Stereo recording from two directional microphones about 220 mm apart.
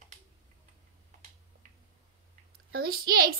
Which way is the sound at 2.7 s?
45° right (ahead or behind).